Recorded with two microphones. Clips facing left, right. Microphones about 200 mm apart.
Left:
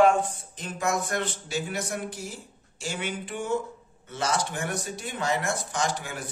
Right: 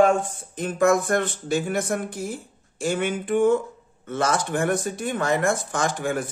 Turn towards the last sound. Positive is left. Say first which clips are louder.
# right 6 dB
turn(degrees=-50)  # may be behind; listen again after turning